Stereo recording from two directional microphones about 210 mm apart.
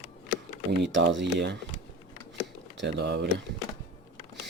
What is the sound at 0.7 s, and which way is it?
Speech, 60° right (ahead or behind).